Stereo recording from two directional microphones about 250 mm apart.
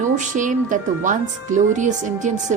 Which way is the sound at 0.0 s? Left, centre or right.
Right.